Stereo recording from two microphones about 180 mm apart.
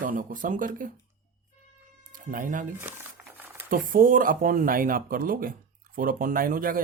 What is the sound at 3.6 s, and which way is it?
Speech, 50° right (ahead or behind).